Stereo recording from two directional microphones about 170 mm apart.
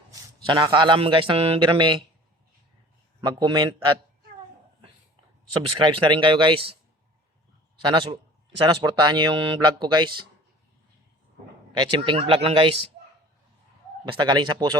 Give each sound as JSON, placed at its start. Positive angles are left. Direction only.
{"t": 0.1, "sound": "speech", "side_deg": -25}
{"t": 3.2, "sound": "speech", "side_deg": -25}
{"t": 5.8, "sound": "speech", "side_deg": -30}
{"t": 7.8, "sound": "speech", "side_deg": -25}
{"t": 11.8, "sound": "speech", "side_deg": -30}
{"t": 14.0, "sound": "speech", "side_deg": -25}